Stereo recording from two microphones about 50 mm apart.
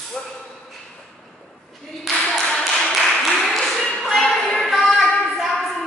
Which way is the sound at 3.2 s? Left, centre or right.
Centre.